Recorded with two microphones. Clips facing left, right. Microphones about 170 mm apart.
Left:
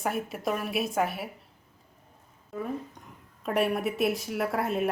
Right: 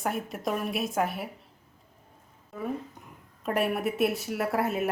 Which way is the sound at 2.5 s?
Centre (ahead or behind).